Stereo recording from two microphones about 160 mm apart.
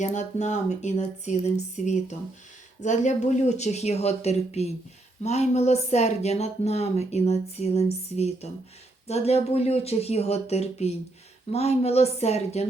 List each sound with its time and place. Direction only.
0.0 s speech: 50° left (ahead or behind)